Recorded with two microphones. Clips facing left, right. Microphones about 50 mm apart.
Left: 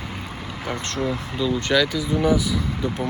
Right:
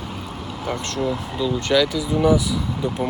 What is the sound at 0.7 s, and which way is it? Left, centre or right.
Speech, left.